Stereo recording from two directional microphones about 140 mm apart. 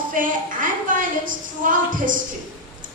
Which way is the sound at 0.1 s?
70° right (ahead or behind).